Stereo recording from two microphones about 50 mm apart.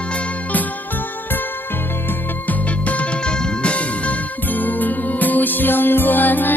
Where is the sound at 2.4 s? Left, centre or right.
Left.